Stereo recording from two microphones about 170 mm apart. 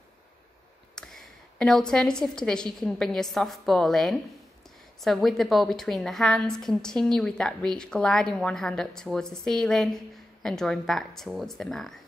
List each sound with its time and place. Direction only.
0.9 s a woman's voice: centre (ahead or behind)